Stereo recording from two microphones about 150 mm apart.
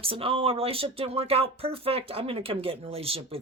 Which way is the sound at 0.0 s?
40° right (ahead or behind).